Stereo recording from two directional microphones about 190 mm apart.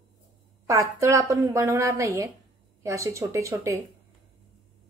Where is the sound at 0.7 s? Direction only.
15° right (ahead or behind).